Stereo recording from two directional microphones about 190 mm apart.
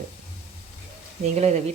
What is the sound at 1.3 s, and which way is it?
Speech, 35° right (ahead or behind).